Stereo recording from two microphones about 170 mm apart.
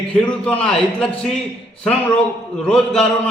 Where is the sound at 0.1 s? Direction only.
5° left (ahead or behind).